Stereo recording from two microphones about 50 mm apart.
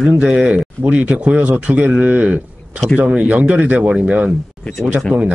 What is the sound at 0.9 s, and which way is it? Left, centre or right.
Speech, right.